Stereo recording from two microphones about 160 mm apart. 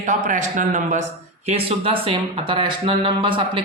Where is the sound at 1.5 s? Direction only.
35° right (ahead or behind).